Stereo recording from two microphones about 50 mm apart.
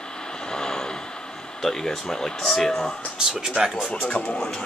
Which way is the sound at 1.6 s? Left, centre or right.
Centre.